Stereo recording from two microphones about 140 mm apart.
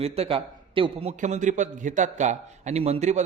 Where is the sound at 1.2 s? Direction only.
60° right (ahead or behind).